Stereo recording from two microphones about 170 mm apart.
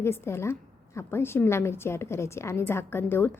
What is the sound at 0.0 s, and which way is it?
A woman's voice, 15° left (ahead or behind).